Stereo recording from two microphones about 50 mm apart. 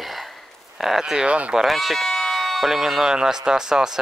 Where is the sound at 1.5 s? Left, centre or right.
Centre.